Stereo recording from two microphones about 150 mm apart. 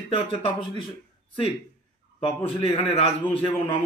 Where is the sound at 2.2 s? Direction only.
40° left (ahead or behind).